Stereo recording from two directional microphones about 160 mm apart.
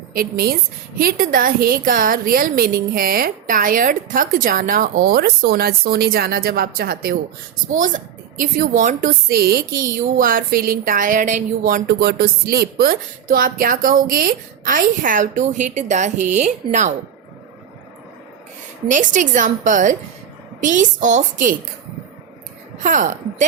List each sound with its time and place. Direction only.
0.1 s a woman's voice: 65° right (ahead or behind)
7.7 s a woman's voice: 55° right (ahead or behind)
18.9 s a woman's voice: 50° right (ahead or behind)
22.8 s a woman's voice: 50° right (ahead or behind)